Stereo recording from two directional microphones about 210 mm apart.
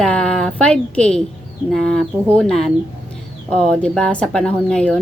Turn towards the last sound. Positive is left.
turn(degrees=5)  # may be behind; listen again after turning